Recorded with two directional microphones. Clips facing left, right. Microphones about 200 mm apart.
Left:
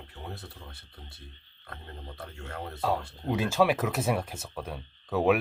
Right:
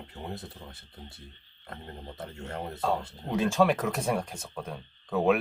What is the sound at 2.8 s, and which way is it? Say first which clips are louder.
Speech: left 1 dB; 5° left (ahead or behind).